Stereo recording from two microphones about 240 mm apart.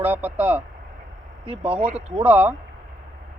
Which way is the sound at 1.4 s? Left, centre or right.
Right.